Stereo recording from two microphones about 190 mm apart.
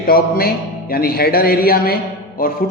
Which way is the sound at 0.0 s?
50° left (ahead or behind).